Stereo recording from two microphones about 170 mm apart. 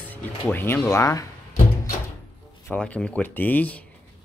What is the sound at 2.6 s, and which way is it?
Speech, 5° left (ahead or behind).